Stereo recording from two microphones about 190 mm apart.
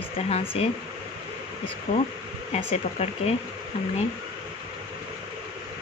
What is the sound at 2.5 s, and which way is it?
Speech, 35° left (ahead or behind).